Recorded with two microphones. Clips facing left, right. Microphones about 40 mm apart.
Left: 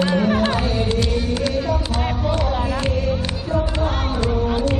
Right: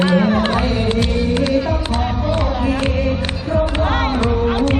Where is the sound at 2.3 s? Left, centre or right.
Right.